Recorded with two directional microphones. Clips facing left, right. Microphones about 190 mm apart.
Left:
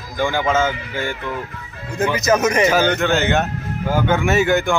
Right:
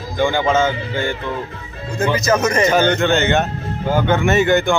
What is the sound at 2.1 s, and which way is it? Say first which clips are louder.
A man's voice: left 1 dB; 20° left (ahead or behind).